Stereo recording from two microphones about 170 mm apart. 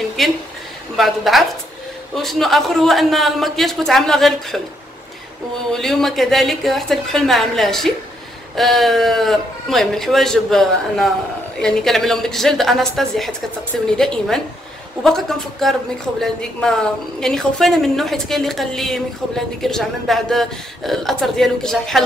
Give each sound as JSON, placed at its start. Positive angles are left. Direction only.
{"t": 0.2, "sound": "a woman's voice", "side_deg": 0}
{"t": 5.7, "sound": "a woman's voice", "side_deg": 5}